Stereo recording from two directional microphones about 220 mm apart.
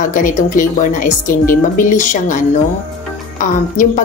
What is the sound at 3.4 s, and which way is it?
Speech, 35° left (ahead or behind).